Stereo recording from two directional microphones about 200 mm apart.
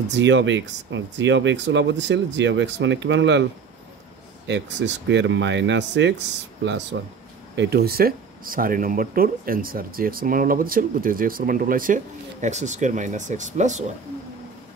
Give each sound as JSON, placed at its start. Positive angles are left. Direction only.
{"t": 0.1, "sound": "speech", "side_deg": -65}
{"t": 4.5, "sound": "speech", "side_deg": -60}
{"t": 7.5, "sound": "speech", "side_deg": -50}